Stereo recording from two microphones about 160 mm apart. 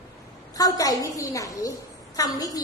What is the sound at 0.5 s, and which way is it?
A child's voice, 20° left (ahead or behind).